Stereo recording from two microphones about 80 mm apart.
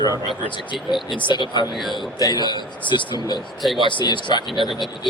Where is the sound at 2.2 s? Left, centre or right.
Left.